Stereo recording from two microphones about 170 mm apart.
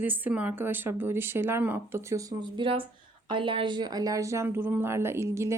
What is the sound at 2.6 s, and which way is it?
Speech, 30° right (ahead or behind).